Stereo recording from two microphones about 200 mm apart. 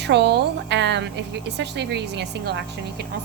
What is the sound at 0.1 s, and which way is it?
A woman's voice, 60° right (ahead or behind).